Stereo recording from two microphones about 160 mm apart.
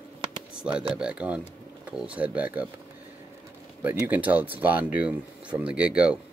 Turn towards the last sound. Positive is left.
turn(degrees=-5)  # may be behind; listen again after turning